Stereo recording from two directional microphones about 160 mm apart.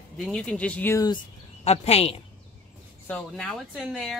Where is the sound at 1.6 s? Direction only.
40° left (ahead or behind).